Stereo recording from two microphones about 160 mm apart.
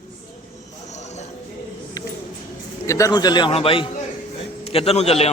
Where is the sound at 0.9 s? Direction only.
45° left (ahead or behind).